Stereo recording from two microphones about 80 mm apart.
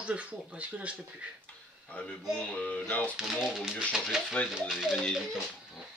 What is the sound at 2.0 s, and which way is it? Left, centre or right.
Speech, centre.